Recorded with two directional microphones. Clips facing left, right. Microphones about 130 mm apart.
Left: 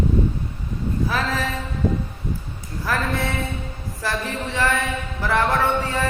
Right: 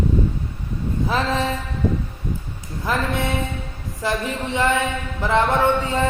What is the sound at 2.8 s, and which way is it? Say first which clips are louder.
Speech: right 1 dB; 20° right (ahead or behind).